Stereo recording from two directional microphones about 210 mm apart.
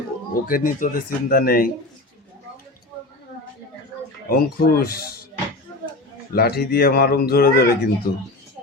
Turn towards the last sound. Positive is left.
turn(degrees=45)  # may be behind; listen again after turning